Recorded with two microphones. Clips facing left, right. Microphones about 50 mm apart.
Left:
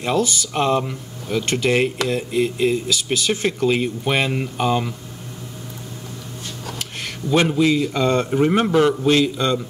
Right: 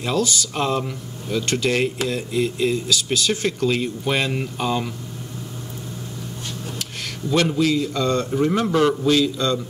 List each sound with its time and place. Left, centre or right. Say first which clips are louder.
0.0 s speech: left 2 dB; centre
7.2 s a man's voice: left 2 dB; left